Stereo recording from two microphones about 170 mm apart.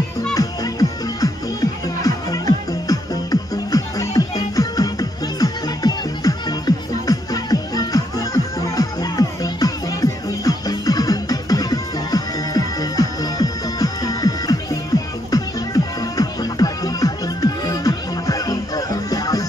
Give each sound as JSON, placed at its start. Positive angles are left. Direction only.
{"t": 0.3, "sound": "music", "side_deg": 20}